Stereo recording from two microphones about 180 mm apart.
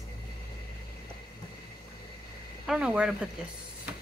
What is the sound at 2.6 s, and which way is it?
Speech, 5° right (ahead or behind).